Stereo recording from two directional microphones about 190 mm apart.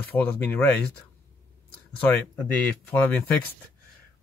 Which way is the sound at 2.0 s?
10° left (ahead or behind).